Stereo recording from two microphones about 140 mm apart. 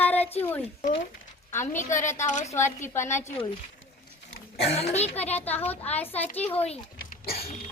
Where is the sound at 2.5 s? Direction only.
20° left (ahead or behind).